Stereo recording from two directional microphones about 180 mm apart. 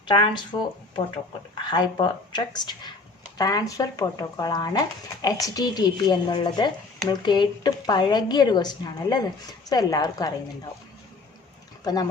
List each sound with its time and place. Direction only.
0.1 s speech: 25° left (ahead or behind)